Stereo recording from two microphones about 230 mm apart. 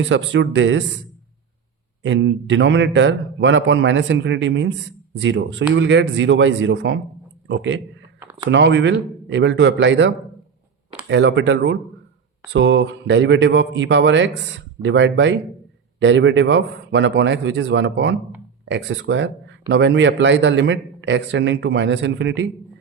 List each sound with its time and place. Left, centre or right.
0.1 s speech: right
2.0 s a man's voice: right
8.2 s a sound: centre
8.4 s speech: right
11.1 s speech: right